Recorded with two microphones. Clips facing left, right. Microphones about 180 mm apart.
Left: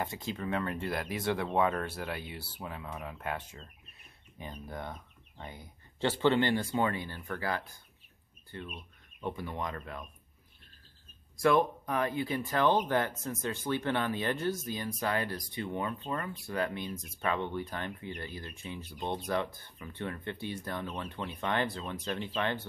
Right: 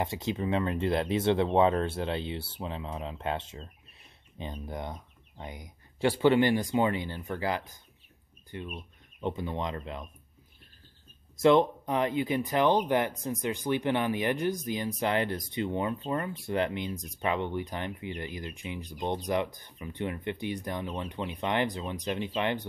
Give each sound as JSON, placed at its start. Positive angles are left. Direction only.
{"t": 0.0, "sound": "speech", "side_deg": -20}
{"t": 11.3, "sound": "speech", "side_deg": -20}